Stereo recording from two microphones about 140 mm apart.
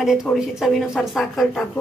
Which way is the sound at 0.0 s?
Centre (ahead or behind).